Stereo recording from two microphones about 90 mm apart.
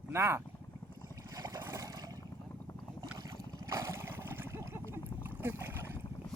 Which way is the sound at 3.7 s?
35° right (ahead or behind).